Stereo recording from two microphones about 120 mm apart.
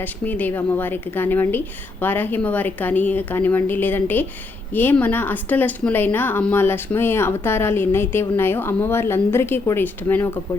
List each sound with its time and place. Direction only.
0.0 s a woman's voice: 15° left (ahead or behind)